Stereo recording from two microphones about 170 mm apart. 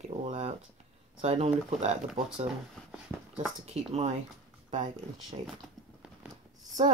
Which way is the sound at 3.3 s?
40° right (ahead or behind).